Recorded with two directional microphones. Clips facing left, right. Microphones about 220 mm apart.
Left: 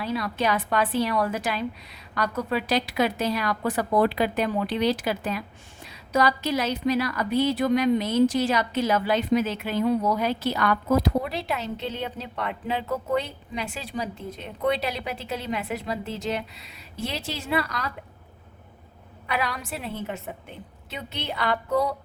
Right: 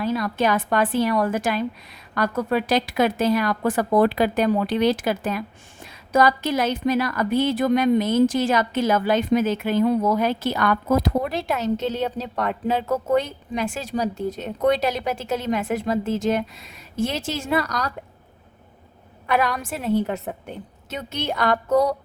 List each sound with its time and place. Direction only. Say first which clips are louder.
0.0 s a woman's voice: right 4 dB; 45° right (ahead or behind)
19.3 s a woman's voice: right 6 dB; 50° right (ahead or behind)